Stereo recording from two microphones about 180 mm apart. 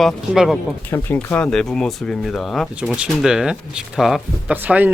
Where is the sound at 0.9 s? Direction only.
10° left (ahead or behind).